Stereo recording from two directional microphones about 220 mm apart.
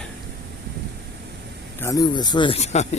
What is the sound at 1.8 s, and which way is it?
Speech, 15° left (ahead or behind).